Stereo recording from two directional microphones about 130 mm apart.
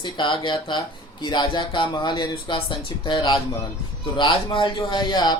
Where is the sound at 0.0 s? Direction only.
40° left (ahead or behind).